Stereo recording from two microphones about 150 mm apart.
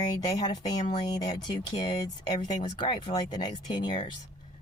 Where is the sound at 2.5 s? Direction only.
50° left (ahead or behind).